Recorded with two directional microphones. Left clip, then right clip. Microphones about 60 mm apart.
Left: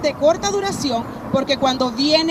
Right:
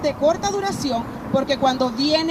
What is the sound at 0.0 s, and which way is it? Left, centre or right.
A woman's voice, left.